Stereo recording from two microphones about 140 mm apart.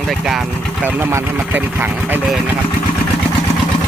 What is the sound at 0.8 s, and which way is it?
Speech, 15° right (ahead or behind).